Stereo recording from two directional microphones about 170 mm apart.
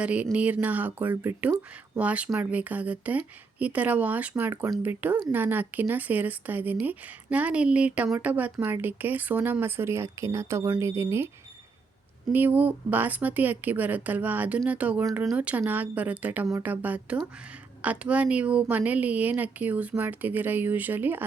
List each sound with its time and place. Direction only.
0.0 s speech: 5° right (ahead or behind)
12.3 s speech: 10° right (ahead or behind)